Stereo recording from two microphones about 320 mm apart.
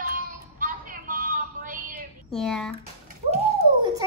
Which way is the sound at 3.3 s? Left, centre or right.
Centre.